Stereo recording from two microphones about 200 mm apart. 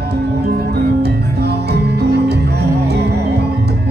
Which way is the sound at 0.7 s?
55° right (ahead or behind).